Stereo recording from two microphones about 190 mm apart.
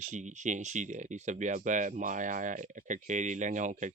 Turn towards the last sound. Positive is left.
turn(degrees=-40)  # may be behind; listen again after turning